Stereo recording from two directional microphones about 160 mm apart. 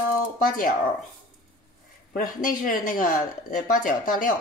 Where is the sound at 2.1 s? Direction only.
55° left (ahead or behind).